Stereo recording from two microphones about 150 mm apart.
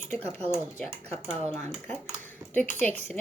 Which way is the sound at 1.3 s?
45° right (ahead or behind).